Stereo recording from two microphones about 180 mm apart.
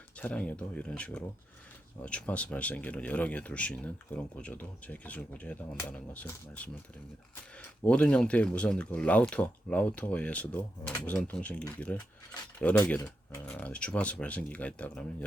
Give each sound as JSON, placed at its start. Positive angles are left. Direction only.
{"t": 0.2, "sound": "speech", "side_deg": 5}